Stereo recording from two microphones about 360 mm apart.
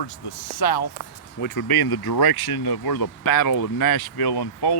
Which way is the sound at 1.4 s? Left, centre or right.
Left.